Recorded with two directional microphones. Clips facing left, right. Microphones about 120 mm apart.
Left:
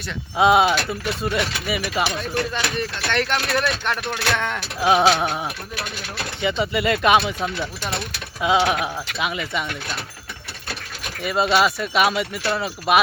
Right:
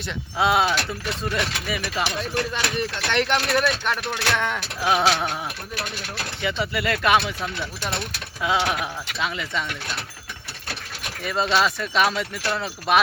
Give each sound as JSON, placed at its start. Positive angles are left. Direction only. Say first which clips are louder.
{"t": 0.3, "sound": "speech", "louder": "left 5 dB", "side_deg": 20}
{"t": 2.5, "sound": "speech", "louder": "left 1 dB", "side_deg": -15}
{"t": 3.6, "sound": "speech", "louder": "even", "side_deg": -5}
{"t": 4.8, "sound": "speech", "louder": "left 4 dB", "side_deg": 20}
{"t": 11.2, "sound": "speech", "louder": "left 3 dB", "side_deg": 10}